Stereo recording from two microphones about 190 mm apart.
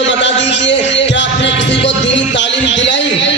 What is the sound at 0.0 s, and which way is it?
Music, 70° left (ahead or behind).